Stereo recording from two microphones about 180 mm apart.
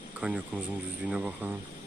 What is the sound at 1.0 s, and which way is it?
Speech, 10° right (ahead or behind).